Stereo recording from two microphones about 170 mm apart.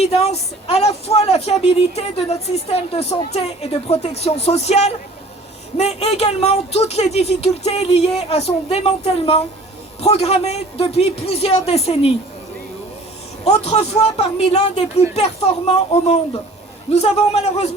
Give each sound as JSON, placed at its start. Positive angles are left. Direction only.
{"t": 0.0, "sound": "speech", "side_deg": 40}
{"t": 13.4, "sound": "speech", "side_deg": 40}